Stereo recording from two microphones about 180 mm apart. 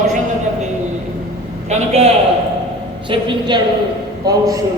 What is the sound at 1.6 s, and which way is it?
Speech, 35° right (ahead or behind).